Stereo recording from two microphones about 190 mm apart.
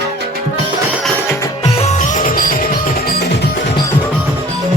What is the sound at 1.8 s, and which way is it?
Music, 40° left (ahead or behind).